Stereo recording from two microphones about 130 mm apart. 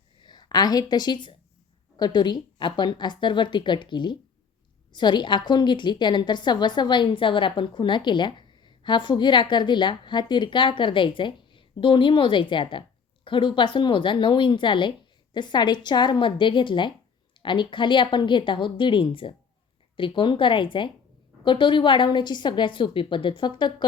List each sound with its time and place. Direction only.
0.2 s a woman's voice: 35° left (ahead or behind)